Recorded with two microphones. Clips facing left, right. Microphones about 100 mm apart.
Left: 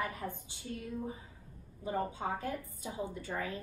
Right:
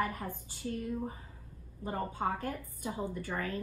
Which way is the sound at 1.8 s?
45° right (ahead or behind).